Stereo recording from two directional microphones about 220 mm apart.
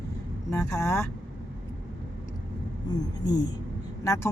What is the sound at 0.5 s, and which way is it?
Speech, 10° left (ahead or behind).